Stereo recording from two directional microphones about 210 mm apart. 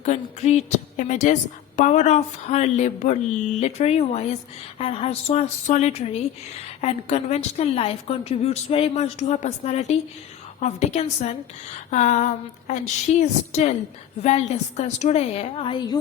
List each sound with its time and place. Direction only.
0.0 s a woman's voice: 30° left (ahead or behind)